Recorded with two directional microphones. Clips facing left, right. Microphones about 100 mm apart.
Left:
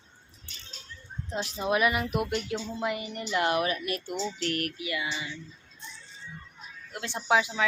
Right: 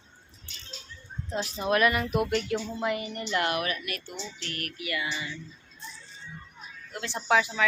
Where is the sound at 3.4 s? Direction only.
30° left (ahead or behind).